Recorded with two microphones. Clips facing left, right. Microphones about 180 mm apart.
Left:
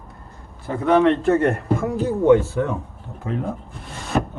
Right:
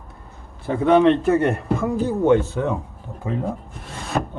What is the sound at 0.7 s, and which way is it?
Speech, 20° right (ahead or behind).